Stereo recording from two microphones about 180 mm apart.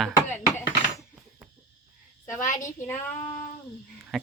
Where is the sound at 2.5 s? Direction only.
45° left (ahead or behind).